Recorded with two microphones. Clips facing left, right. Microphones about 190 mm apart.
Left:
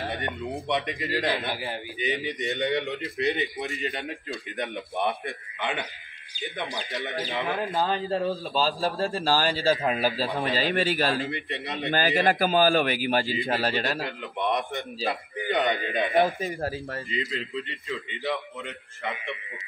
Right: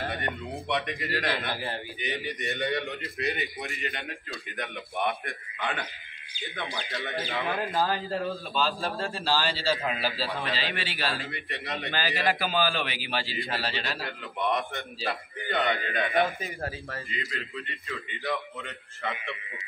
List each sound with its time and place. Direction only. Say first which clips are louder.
0.7 s a man's voice: left 1 dB; 20° left (ahead or behind); by 11.1 s 40° left (ahead or behind)
11.1 s a man's voice: left 6 dB; 20° left (ahead or behind)
12.3 s a man's voice: left 5 dB; 45° left (ahead or behind)
13.9 s a man's voice: left 3 dB; 20° left (ahead or behind)
16.3 s a man's voice: left 5 dB; 35° left (ahead or behind)
17.1 s a man's voice: left 8 dB; 20° left (ahead or behind)